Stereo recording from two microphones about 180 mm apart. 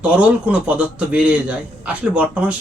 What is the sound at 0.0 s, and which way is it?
A man's voice, 5° right (ahead or behind).